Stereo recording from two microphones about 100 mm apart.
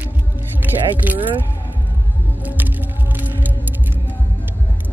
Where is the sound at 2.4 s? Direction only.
15° right (ahead or behind).